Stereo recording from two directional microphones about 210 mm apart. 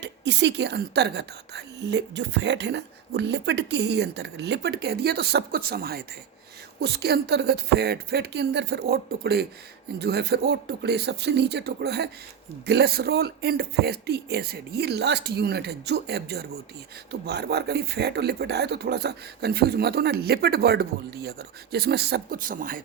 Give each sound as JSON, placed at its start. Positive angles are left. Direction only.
{"t": 0.0, "sound": "speech", "side_deg": -55}